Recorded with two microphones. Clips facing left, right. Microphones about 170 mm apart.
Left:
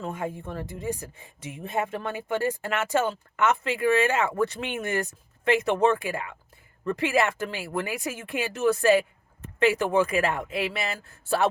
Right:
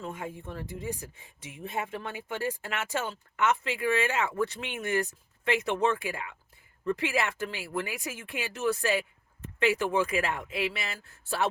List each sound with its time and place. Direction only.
0.0 s speech: 45° left (ahead or behind)